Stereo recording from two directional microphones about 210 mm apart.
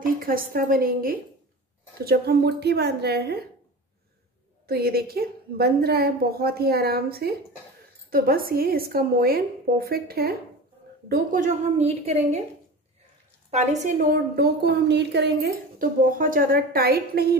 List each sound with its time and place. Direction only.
0.0 s a woman's voice: 40° right (ahead or behind)
4.6 s a woman's voice: 45° right (ahead or behind); by 12.4 s 30° right (ahead or behind)
13.5 s a woman's voice: 35° right (ahead or behind)